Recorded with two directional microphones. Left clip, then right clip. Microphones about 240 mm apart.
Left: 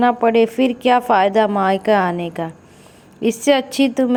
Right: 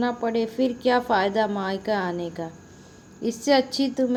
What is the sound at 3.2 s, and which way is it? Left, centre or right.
Speech, left.